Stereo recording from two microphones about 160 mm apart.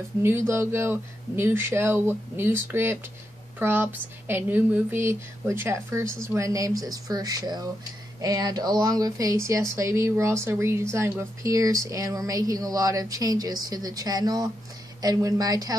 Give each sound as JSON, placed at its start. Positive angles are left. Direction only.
{"t": 0.2, "sound": "speech", "side_deg": -15}